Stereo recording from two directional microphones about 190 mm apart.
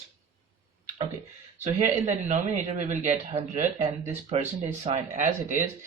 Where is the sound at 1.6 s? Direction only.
40° right (ahead or behind).